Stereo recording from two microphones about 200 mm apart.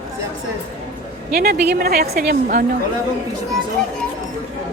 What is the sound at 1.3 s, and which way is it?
A woman's voice, 50° right (ahead or behind).